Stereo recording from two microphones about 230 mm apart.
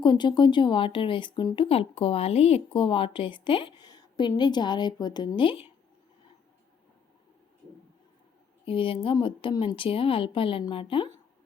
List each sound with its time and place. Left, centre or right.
0.0 s speech: centre
8.6 s speech: left